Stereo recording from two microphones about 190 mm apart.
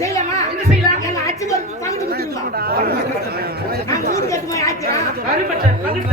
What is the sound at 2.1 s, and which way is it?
Speech, 55° right (ahead or behind).